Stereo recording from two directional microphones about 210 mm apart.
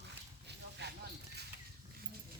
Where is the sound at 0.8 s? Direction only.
50° right (ahead or behind).